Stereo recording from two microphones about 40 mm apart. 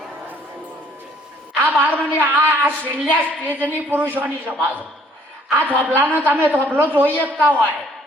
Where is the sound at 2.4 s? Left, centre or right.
Right.